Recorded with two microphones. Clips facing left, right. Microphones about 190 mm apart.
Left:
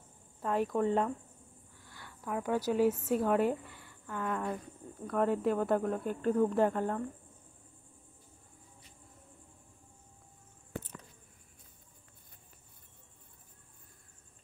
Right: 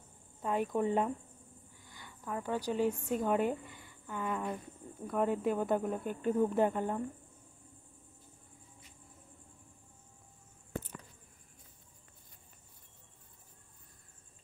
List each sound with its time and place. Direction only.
0.4 s speech: centre (ahead or behind)
2.2 s speech: 10° left (ahead or behind); by 7.0 s 5° right (ahead or behind)